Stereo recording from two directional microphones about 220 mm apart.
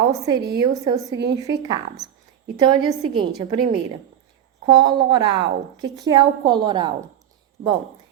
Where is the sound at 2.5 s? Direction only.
20° right (ahead or behind).